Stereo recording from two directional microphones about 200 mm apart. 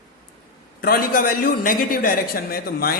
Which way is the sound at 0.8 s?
50° left (ahead or behind).